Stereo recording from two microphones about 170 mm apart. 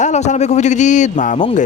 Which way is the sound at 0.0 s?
45° left (ahead or behind).